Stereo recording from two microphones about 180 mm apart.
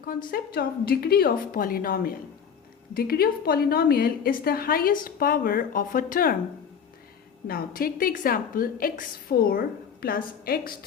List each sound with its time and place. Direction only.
0.0 s a woman's voice: 55° left (ahead or behind)
7.4 s a woman's voice: 55° left (ahead or behind)